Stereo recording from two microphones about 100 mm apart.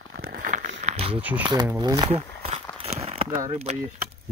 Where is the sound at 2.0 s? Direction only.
80° right.